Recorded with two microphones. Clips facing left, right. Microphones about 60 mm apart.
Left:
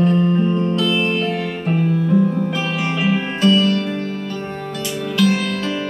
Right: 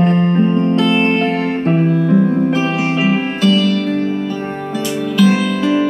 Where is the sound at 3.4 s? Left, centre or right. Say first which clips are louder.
Right 1 dB; centre.